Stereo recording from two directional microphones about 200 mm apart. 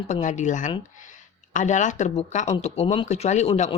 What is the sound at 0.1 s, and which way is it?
Speech, 40° left (ahead or behind).